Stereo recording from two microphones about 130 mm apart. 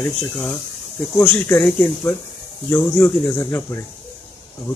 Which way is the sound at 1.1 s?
15° left (ahead or behind).